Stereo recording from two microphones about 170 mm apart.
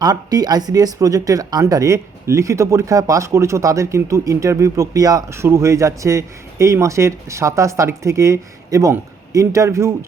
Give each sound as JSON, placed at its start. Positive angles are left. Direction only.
{"t": 0.0, "sound": "speech", "side_deg": -20}